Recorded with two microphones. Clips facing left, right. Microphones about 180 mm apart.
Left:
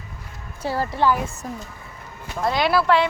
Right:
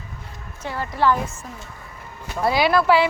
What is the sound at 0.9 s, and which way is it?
Speech, 15° left (ahead or behind).